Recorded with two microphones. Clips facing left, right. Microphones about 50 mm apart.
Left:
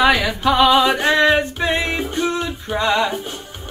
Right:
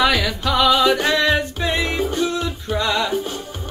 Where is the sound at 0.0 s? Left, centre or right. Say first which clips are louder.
Left 3 dB; left.